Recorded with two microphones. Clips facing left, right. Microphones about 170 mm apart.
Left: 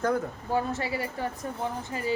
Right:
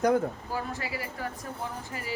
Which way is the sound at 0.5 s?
25° left (ahead or behind).